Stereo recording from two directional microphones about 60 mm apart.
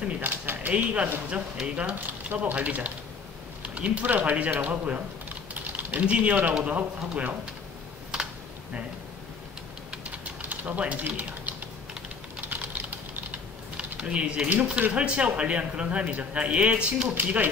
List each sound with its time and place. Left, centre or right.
0.2 s speech: right
10.5 s speech: right
12.4 s typing: right
14.7 s speech: centre
17.1 s speech: right